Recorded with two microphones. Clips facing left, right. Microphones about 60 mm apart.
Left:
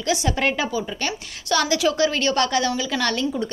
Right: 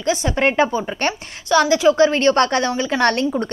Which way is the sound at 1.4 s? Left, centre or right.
Right.